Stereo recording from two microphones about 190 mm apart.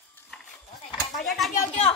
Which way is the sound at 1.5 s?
35° left (ahead or behind).